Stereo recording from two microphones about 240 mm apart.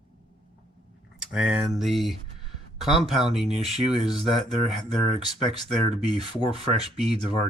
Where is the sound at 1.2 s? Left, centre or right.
Centre.